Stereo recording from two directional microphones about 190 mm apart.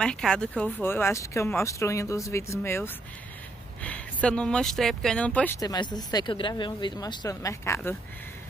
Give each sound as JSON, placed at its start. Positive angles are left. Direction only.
{"t": 0.0, "sound": "speech", "side_deg": 5}
{"t": 5.6, "sound": "speech", "side_deg": 20}